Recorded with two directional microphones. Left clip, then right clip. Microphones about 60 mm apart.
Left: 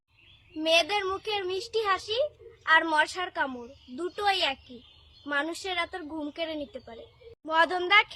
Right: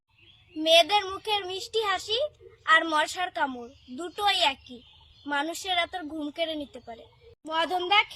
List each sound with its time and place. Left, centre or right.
0.6 s a child's voice: left